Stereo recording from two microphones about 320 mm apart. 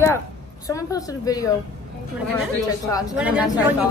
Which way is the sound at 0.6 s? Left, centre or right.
Centre.